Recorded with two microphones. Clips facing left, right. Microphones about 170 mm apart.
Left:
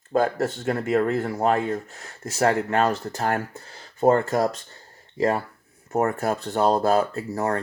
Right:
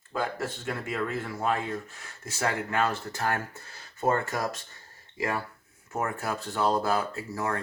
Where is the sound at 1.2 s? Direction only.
45° left (ahead or behind).